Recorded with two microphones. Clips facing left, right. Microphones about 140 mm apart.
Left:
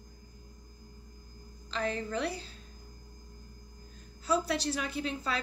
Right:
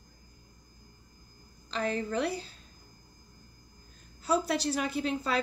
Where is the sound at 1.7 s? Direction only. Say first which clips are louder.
Right 2 dB; 35° right (ahead or behind).